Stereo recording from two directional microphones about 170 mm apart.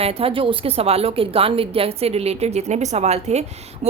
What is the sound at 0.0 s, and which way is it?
Speech, 35° right (ahead or behind).